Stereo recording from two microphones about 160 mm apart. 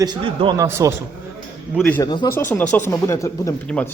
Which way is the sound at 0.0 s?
30° right (ahead or behind).